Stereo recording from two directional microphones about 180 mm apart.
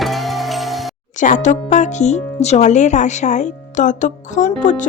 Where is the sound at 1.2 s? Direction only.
45° left (ahead or behind).